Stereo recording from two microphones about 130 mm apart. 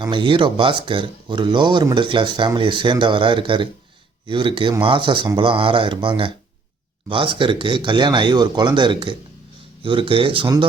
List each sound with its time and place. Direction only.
0.1 s speech: 40° right (ahead or behind)